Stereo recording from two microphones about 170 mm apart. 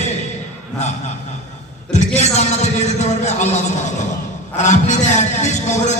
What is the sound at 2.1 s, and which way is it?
A man's voice, 40° left (ahead or behind).